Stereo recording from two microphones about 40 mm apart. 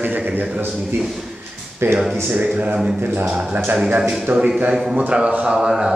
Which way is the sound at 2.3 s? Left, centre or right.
Right.